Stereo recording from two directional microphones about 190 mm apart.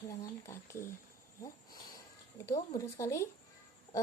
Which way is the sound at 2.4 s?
15° left (ahead or behind).